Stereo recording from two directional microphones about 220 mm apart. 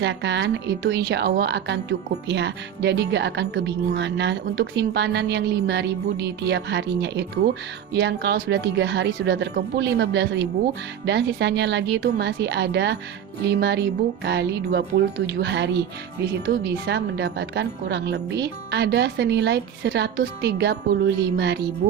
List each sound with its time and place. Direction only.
0.0 s a woman's voice: 50° right (ahead or behind)